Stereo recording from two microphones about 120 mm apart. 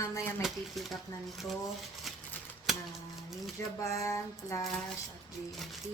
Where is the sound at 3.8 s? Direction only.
25° left (ahead or behind).